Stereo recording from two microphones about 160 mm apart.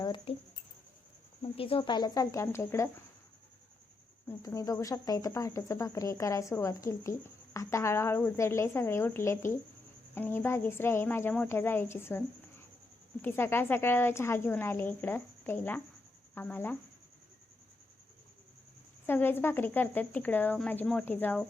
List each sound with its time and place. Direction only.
0.0 s speech: 30° left (ahead or behind)
1.4 s speech: 35° left (ahead or behind); by 2.9 s 15° left (ahead or behind)
4.3 s speech: 20° left (ahead or behind)
19.0 s speech: 15° left (ahead or behind)